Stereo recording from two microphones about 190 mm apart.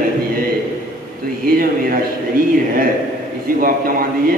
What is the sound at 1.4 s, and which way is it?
A man's voice, 50° right (ahead or behind).